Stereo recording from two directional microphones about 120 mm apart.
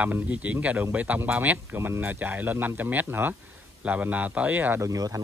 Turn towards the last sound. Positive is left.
turn(degrees=-30)  # may be behind; listen again after turning